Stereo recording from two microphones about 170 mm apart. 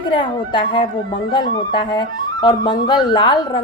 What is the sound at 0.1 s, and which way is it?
A woman's voice, 30° left (ahead or behind).